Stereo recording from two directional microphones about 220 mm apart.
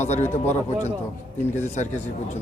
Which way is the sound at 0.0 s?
30° left (ahead or behind).